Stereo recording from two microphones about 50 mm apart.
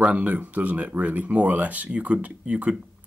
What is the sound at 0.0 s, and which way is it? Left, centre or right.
Speech, right.